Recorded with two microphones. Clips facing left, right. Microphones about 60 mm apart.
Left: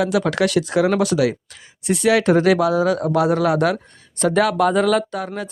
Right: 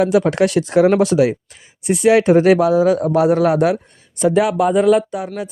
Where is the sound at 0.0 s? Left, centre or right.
Right.